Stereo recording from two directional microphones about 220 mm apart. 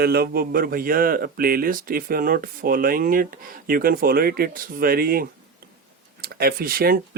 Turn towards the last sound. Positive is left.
turn(degrees=-40)  # may be behind; listen again after turning